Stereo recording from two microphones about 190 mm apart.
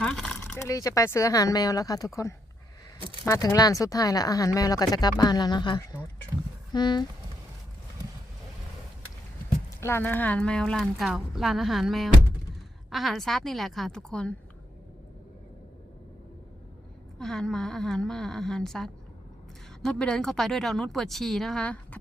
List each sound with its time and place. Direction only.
0.0 s a sound: 5° left (ahead or behind)
0.5 s speech: 15° left (ahead or behind)
9.8 s speech: 10° left (ahead or behind)
17.2 s speech: 5° left (ahead or behind)